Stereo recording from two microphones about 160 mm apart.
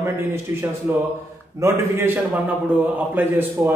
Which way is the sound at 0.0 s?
15° right (ahead or behind).